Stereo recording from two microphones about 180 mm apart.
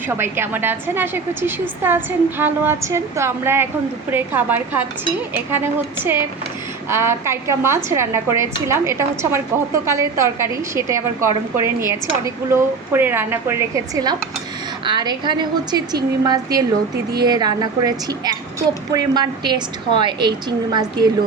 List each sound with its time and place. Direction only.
0.2 s a woman's voice: 10° right (ahead or behind)